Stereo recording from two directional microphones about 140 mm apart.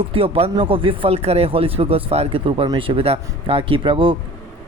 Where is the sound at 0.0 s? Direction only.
40° right (ahead or behind).